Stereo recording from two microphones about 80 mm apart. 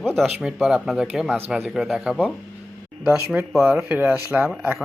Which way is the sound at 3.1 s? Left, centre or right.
Right.